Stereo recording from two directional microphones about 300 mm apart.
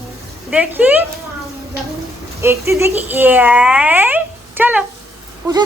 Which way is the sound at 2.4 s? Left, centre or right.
Centre.